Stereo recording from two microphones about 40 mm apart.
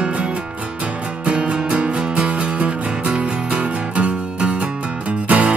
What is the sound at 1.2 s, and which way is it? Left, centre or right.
Music, right.